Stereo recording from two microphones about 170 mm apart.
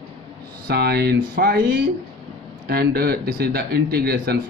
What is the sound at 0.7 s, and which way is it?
Speech, 70° right (ahead or behind).